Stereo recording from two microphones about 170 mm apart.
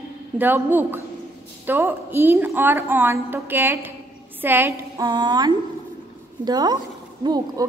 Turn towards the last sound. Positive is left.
turn(degrees=-25)  # may be behind; listen again after turning